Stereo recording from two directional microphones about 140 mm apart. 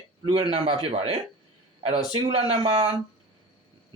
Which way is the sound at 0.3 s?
40° right (ahead or behind).